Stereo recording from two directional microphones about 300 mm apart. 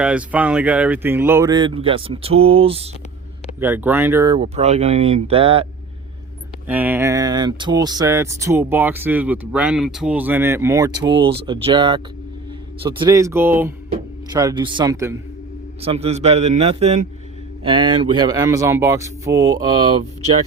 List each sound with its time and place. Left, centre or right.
0.0 s speech: centre
3.6 s speech: centre
6.7 s speech: centre